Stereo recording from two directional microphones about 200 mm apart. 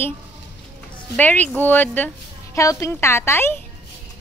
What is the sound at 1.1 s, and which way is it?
A woman's voice, 10° left (ahead or behind).